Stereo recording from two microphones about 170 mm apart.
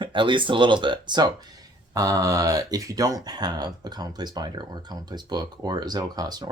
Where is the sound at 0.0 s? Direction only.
30° right (ahead or behind).